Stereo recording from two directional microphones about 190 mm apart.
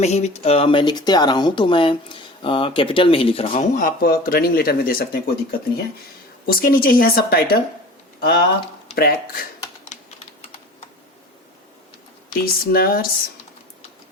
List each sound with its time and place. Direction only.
0.0 s speech: 35° left (ahead or behind); by 7.4 s 50° left (ahead or behind)
9.0 s speech: 55° left (ahead or behind)
12.3 s speech: 50° left (ahead or behind)